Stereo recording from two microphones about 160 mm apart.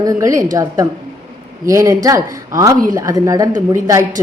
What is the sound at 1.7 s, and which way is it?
A woman's voice, 20° right (ahead or behind).